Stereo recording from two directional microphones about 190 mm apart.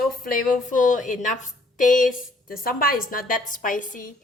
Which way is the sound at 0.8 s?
40° left (ahead or behind).